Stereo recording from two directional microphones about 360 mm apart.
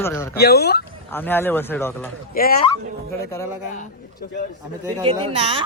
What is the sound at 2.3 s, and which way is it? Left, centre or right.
Speech, left.